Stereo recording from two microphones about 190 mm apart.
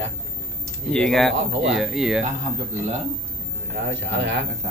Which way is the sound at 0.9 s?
Centre (ahead or behind).